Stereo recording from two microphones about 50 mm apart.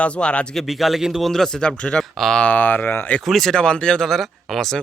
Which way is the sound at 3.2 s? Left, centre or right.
Centre.